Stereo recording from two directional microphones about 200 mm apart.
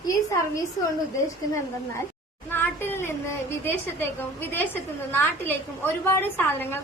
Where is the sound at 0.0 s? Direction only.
15° left (ahead or behind).